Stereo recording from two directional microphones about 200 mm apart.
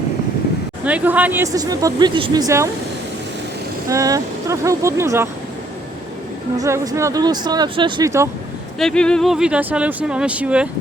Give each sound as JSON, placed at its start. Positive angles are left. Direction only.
{"t": 0.9, "sound": "speech", "side_deg": -5}
{"t": 3.8, "sound": "speech", "side_deg": -15}
{"t": 6.6, "sound": "speech", "side_deg": -15}
{"t": 8.8, "sound": "speech", "side_deg": 5}